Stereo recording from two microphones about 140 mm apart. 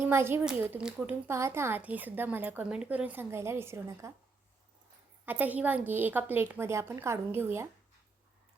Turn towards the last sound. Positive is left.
turn(degrees=-15)  # may be behind; listen again after turning